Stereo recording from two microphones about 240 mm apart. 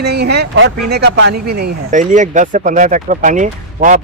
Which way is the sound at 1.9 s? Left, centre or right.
Right.